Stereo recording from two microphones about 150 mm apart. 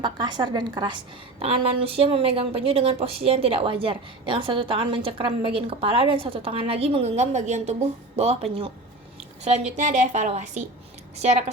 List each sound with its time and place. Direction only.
0.0 s a woman's voice: 30° right (ahead or behind); by 11.4 s 45° right (ahead or behind)